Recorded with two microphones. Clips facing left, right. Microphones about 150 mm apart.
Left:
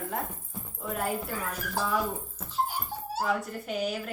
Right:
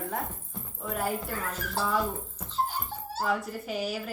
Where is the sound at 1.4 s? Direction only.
15° left (ahead or behind).